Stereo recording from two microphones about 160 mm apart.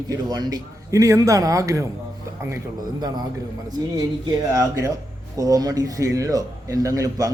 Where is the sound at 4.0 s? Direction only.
25° right (ahead or behind).